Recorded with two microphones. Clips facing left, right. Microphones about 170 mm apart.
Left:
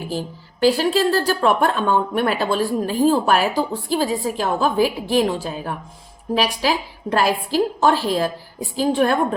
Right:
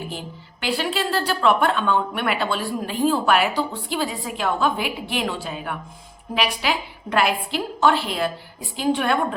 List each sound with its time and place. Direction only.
0.1 s a woman's voice: 40° left (ahead or behind)